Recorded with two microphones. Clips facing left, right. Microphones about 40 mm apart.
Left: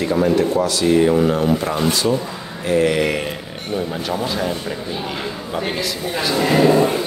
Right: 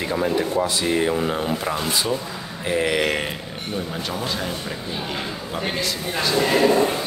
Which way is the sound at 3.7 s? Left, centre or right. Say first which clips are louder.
Left 6 dB; centre.